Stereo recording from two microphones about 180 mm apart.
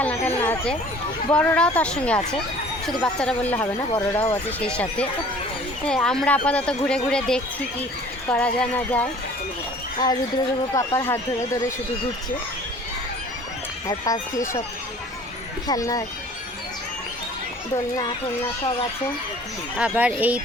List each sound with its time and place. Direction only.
0.0 s a sound: 10° left (ahead or behind)
1.3 s speech: 5° left (ahead or behind)
10.0 s speech: 20° left (ahead or behind)
13.8 s speech: 20° left (ahead or behind)
15.6 s speech: 20° left (ahead or behind)
19.7 s speech: 5° right (ahead or behind)